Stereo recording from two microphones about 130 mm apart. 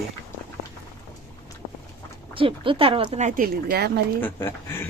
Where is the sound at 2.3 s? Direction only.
45° right (ahead or behind).